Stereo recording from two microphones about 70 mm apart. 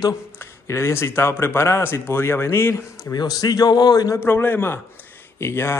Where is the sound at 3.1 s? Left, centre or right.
Left.